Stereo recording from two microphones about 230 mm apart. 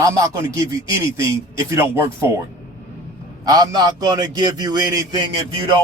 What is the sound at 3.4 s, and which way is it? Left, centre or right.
A man's voice, centre.